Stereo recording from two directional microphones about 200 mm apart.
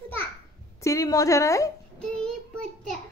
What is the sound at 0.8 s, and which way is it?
Speech, 15° left (ahead or behind).